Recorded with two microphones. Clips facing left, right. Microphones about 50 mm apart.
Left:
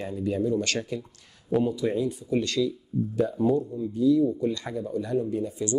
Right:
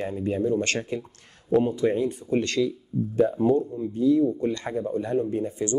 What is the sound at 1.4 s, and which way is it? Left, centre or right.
Speech, right.